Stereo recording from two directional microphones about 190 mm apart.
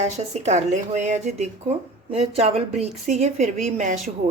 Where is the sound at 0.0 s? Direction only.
35° right (ahead or behind).